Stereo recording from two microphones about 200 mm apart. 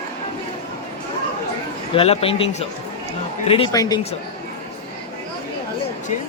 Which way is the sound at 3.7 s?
15° left (ahead or behind).